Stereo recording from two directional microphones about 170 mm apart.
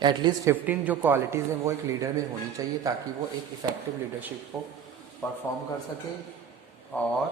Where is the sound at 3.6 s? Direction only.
20° right (ahead or behind).